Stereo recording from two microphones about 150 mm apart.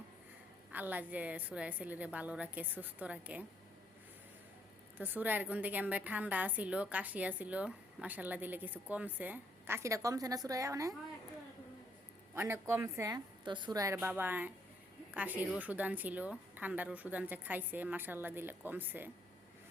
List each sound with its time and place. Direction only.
0.7 s a woman's voice: 10° right (ahead or behind)
4.9 s a woman's voice: 10° right (ahead or behind)
12.3 s a woman's voice: 15° right (ahead or behind)